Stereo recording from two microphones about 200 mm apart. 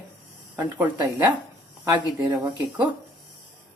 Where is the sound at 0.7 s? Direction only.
15° right (ahead or behind).